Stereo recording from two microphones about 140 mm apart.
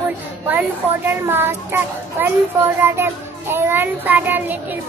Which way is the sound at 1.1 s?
15° right (ahead or behind).